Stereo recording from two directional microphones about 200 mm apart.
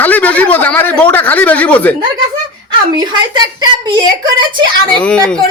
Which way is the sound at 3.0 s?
20° right (ahead or behind).